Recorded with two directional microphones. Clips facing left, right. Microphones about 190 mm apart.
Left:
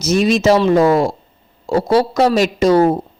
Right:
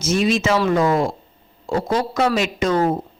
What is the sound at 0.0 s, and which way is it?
Speech, 40° left (ahead or behind).